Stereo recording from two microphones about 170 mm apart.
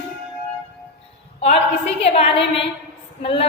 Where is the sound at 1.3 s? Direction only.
35° left (ahead or behind).